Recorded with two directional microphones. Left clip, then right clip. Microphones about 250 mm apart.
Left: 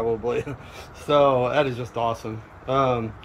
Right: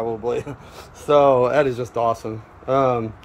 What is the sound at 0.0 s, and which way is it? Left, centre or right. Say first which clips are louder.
Speech: right 1 dB; centre.